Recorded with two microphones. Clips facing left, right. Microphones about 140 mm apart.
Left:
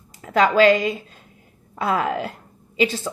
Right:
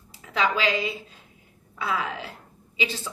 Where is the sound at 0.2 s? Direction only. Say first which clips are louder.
Left 10 dB; 50° left (ahead or behind).